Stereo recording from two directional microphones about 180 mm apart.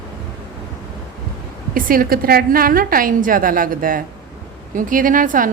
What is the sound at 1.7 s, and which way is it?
A woman's voice, 50° right (ahead or behind).